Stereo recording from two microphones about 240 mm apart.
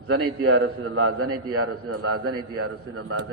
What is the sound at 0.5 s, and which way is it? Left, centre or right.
A man's voice, right.